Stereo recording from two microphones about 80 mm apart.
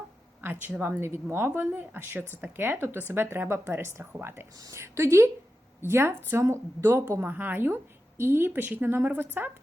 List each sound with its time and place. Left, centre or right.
0.4 s a woman's voice: right
4.5 s speech: right
4.8 s a woman's voice: right
7.2 s a woman's voice: right